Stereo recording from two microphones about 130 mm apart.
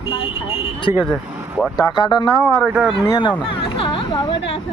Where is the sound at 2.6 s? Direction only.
5° right (ahead or behind).